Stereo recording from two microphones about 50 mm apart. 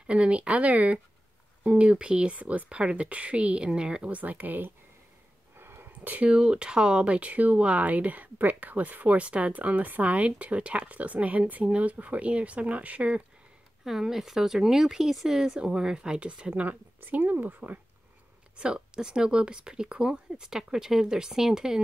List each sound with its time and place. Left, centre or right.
0.0 s speech: right
1.9 s speech: centre
4.1 s speech: right
5.6 s a sound: right
6.0 s speech: right
6.3 s speech: centre
13.8 s speech: centre; by 16.7 s right
17.0 s speech: right
18.6 s speech: centre